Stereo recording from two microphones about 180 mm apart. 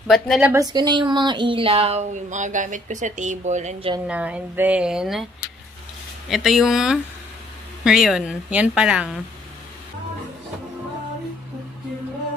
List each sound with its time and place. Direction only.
0.1 s speech: centre (ahead or behind)
0.5 s a woman's voice: 20° right (ahead or behind); by 3.9 s 40° right (ahead or behind)
4.1 s speech: 5° right (ahead or behind)
6.2 s speech: centre (ahead or behind)